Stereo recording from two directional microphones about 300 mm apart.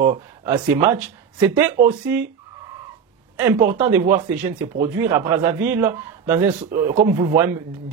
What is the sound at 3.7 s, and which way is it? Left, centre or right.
Speech, centre.